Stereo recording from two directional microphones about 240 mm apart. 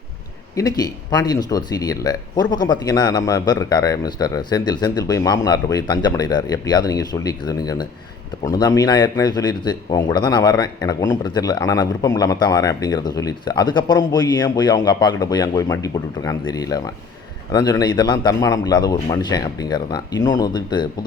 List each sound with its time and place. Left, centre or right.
0.5 s speech: centre